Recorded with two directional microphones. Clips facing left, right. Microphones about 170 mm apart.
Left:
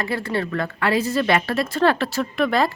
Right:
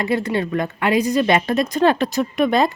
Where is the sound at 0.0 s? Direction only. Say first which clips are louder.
Right 4 dB; 20° right (ahead or behind).